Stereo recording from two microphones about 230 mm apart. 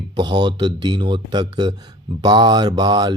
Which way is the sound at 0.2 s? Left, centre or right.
Centre.